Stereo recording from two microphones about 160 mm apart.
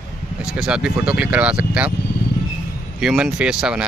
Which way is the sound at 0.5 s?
5° right (ahead or behind).